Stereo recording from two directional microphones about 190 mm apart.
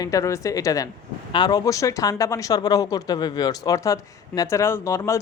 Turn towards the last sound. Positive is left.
turn(degrees=15)  # may be behind; listen again after turning